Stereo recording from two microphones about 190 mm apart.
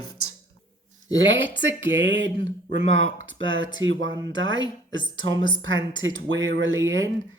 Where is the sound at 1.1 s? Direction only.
85° right.